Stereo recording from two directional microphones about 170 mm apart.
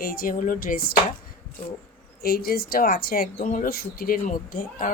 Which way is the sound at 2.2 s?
65° left (ahead or behind).